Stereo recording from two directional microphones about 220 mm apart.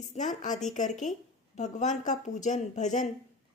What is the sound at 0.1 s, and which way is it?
Speech, 35° left (ahead or behind).